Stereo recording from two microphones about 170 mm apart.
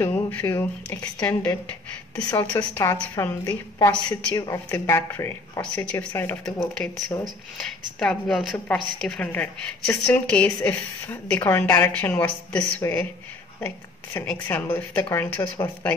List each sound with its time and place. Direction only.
0.0 s a woman's voice: 10° left (ahead or behind)
6.7 s a woman's voice: 5° left (ahead or behind)